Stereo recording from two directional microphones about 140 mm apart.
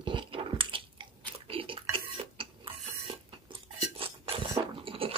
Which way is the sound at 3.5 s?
35° right (ahead or behind).